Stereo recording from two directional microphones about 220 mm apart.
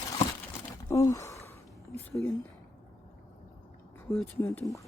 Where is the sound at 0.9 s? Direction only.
15° left (ahead or behind).